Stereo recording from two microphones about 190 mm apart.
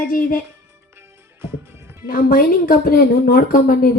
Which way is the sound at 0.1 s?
50° left (ahead or behind).